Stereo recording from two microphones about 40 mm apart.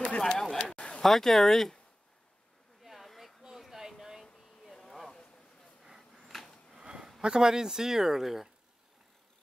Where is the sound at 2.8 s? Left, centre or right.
Centre.